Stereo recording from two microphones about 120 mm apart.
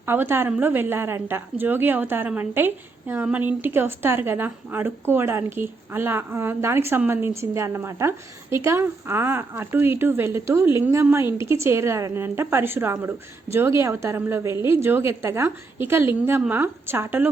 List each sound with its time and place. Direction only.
0.0 s a woman's voice: 20° right (ahead or behind)